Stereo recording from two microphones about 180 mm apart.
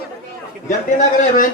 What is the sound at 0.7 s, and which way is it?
Speech, 45° left (ahead or behind).